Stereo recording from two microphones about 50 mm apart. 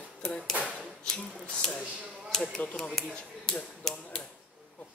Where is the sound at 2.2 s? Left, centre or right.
Centre.